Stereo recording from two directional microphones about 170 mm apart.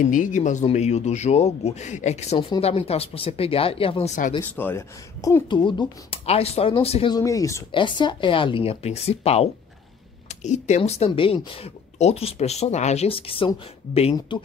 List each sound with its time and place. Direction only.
0.1 s speech: 50° left (ahead or behind)
4.4 s speech: 10° left (ahead or behind)
5.5 s speech: 30° left (ahead or behind)
7.2 s speech: 20° left (ahead or behind)